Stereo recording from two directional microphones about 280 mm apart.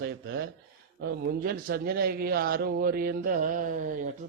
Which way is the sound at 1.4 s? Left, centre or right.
Right.